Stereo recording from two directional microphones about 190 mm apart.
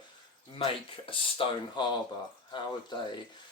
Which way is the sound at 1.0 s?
30° left (ahead or behind).